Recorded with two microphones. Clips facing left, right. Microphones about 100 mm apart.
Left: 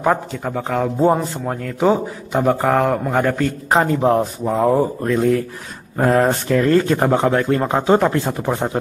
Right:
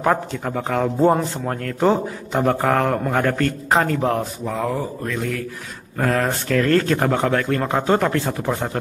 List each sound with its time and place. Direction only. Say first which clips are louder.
0.0 s a man's voice: left 1 dB; 5° left (ahead or behind)
3.8 s speech: left 5 dB; 20° left (ahead or behind)